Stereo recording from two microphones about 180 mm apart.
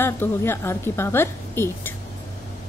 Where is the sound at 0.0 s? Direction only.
15° left (ahead or behind).